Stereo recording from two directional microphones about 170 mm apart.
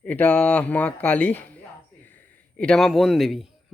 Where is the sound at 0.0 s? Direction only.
10° left (ahead or behind).